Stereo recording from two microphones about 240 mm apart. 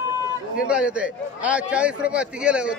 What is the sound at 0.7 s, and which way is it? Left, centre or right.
A man's voice, centre.